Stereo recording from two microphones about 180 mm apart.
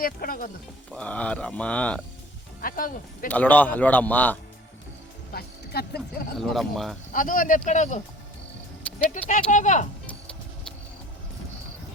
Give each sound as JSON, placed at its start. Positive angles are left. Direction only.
{"t": 0.0, "sound": "speech", "side_deg": 55}
{"t": 0.9, "sound": "speech", "side_deg": 5}
{"t": 2.6, "sound": "speech", "side_deg": 55}
{"t": 3.2, "sound": "speech", "side_deg": 10}
{"t": 5.3, "sound": "speech", "side_deg": 60}
{"t": 6.4, "sound": "speech", "side_deg": 0}
{"t": 7.1, "sound": "speech", "side_deg": 50}
{"t": 9.2, "sound": "speech", "side_deg": 45}